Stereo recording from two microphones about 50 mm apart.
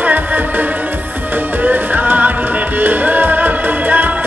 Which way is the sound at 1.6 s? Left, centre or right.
Right.